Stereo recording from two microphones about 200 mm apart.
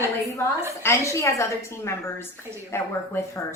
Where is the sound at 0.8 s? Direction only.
15° left (ahead or behind).